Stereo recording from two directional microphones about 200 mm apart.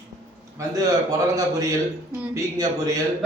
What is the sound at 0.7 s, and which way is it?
A man's voice, 15° right (ahead or behind).